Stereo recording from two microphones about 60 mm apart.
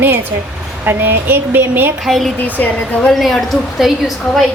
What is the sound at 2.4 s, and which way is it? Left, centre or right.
Speech, left.